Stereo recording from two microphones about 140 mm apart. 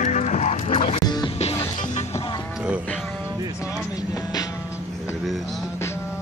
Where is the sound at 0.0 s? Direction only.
65° left (ahead or behind).